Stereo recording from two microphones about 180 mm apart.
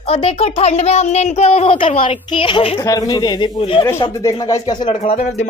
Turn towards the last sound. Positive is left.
turn(degrees=40)  # may be behind; listen again after turning